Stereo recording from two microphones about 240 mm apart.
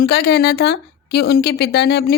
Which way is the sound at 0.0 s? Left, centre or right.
Left.